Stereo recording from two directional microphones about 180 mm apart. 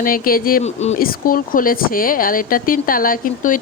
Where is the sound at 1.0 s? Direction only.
55° left (ahead or behind).